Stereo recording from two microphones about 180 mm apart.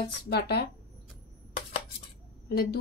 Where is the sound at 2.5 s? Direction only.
60° left (ahead or behind).